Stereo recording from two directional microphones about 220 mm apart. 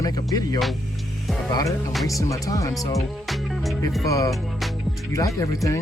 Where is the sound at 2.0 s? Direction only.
15° left (ahead or behind).